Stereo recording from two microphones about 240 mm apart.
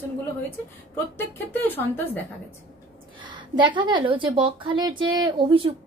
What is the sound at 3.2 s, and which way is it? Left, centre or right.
Speech, centre.